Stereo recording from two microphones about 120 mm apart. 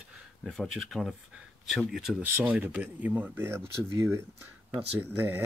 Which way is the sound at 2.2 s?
15° right (ahead or behind).